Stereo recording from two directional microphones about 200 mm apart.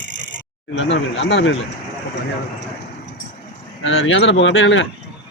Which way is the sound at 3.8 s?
75° left (ahead or behind).